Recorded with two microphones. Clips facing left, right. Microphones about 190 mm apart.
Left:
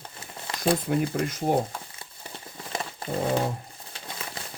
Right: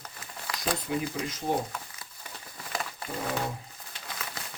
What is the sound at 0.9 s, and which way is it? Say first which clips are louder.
Speech: left 5 dB; 55° left (ahead or behind).